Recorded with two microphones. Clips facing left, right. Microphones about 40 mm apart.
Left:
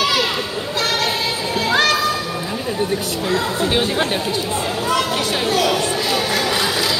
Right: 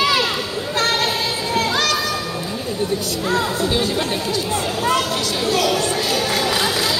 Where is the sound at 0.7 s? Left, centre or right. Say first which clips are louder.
Right 1 dB; right.